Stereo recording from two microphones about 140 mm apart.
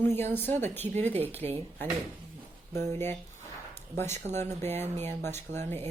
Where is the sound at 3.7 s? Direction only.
15° left (ahead or behind).